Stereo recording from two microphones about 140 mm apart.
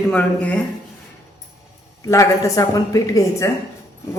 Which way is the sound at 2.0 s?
20° left (ahead or behind).